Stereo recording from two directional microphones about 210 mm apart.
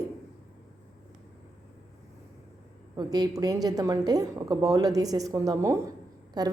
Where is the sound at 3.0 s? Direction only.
20° right (ahead or behind).